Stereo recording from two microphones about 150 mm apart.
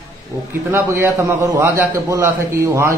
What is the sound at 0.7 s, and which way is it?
A man's voice, 20° right (ahead or behind).